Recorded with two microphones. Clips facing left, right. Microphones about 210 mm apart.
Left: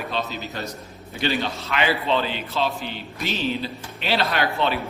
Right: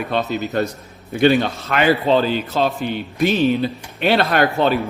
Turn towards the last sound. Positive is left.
turn(degrees=-45)  # may be behind; listen again after turning